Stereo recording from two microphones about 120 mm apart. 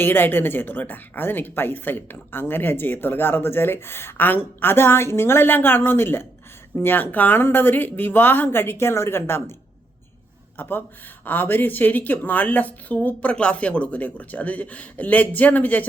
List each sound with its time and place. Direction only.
0.0 s a woman's voice: 15° left (ahead or behind)
10.6 s a woman's voice: 15° left (ahead or behind)